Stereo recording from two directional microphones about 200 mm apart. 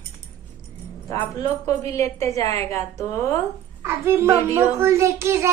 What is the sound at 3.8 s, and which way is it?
A child's voice, 15° right (ahead or behind).